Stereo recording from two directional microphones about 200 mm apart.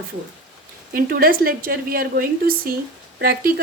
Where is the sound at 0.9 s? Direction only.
45° right (ahead or behind).